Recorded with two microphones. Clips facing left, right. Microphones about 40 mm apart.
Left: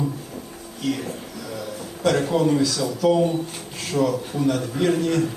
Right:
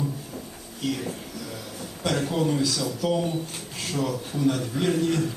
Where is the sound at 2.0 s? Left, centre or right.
Centre.